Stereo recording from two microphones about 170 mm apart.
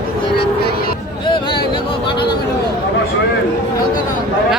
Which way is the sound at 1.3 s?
30° left (ahead or behind).